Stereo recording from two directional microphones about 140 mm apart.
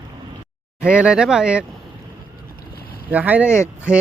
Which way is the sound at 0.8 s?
5° right (ahead or behind).